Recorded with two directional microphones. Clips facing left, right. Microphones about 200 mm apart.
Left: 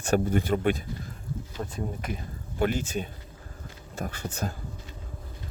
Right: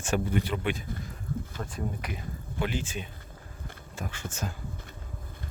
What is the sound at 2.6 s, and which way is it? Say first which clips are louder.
Speech: left 5 dB; 45° left (ahead or behind).